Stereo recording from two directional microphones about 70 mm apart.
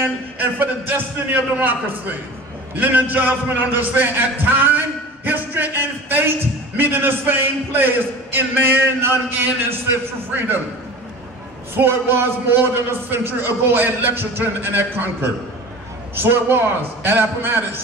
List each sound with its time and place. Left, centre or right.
0.0 s a man's voice: right
11.7 s a man's voice: right